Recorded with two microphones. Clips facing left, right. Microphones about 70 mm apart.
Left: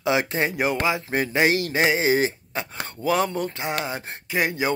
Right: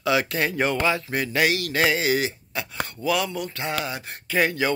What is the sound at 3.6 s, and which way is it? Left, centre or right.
Speech, left.